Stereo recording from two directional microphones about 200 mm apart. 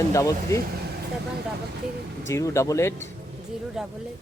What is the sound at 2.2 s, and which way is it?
Speech, 15° left (ahead or behind).